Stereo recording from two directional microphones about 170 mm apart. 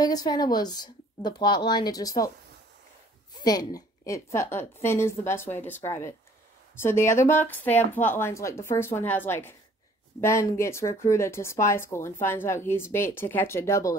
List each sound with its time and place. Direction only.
0.0 s speech: 20° left (ahead or behind)
3.3 s speech: 20° left (ahead or behind)